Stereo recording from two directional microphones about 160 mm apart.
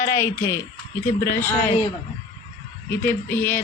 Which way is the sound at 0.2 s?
20° left (ahead or behind).